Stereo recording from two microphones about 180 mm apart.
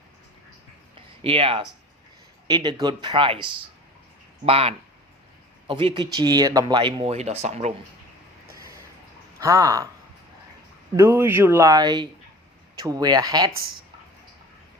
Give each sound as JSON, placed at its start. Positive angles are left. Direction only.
{"t": 0.9, "sound": "a sound", "side_deg": -30}
{"t": 2.5, "sound": "speech", "side_deg": -25}
{"t": 4.4, "sound": "speech", "side_deg": -35}
{"t": 9.4, "sound": "speech", "side_deg": -15}
{"t": 10.9, "sound": "speech", "side_deg": -15}